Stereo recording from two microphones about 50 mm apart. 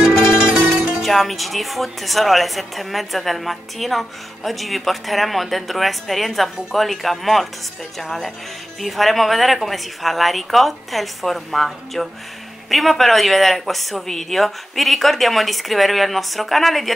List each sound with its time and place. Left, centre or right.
0.7 s music: centre
1.0 s speech: centre